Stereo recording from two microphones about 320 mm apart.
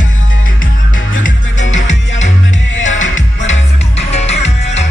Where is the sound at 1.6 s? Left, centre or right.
Left.